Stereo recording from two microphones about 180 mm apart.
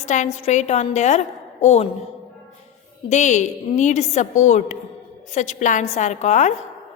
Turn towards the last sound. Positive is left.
turn(degrees=40)  # may be behind; listen again after turning